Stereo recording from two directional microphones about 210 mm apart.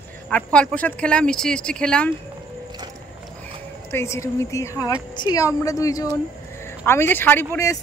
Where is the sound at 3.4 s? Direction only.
10° left (ahead or behind).